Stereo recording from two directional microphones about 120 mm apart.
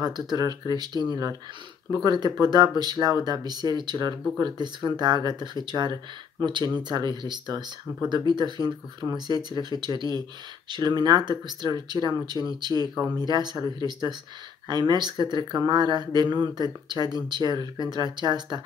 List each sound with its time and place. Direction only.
0.0 s speech: 35° right (ahead or behind)